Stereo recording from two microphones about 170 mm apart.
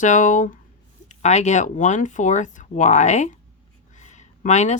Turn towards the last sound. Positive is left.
turn(degrees=45)  # may be behind; listen again after turning